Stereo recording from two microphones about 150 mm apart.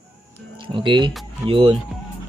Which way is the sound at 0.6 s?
35° right (ahead or behind).